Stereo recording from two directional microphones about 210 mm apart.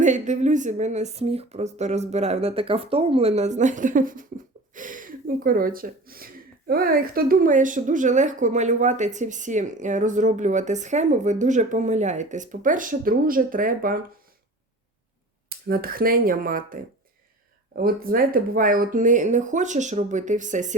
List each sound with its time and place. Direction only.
0.0 s speech: 35° right (ahead or behind)
15.4 s speech: 45° right (ahead or behind)
17.8 s speech: 45° right (ahead or behind)